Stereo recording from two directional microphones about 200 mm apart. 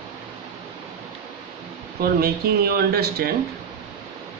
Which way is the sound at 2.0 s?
50° right (ahead or behind).